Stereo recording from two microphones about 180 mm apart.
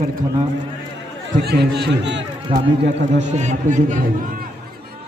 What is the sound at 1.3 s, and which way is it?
Speech, 65° right (ahead or behind).